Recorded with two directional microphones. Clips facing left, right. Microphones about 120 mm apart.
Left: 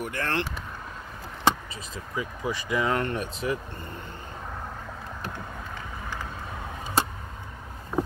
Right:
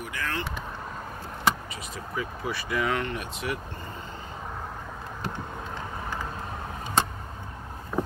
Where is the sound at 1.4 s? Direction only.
25° left (ahead or behind).